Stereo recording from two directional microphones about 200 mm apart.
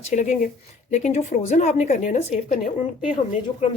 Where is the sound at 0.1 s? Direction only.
40° left (ahead or behind).